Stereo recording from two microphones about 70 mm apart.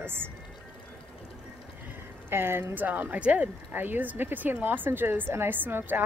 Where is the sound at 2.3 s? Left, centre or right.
Right.